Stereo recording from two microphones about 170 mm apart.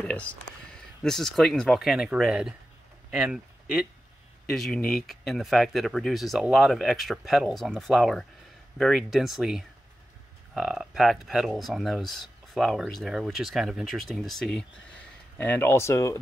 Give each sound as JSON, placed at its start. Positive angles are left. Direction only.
{"t": 0.0, "sound": "speech", "side_deg": 10}